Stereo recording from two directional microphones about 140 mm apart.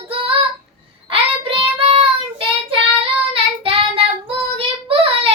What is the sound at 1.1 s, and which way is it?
Child singing, 40° right (ahead or behind).